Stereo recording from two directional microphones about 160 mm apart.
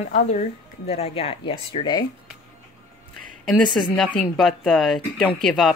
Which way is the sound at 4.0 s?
Centre (ahead or behind).